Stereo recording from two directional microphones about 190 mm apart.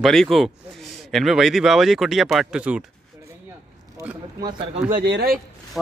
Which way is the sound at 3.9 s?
20° right (ahead or behind).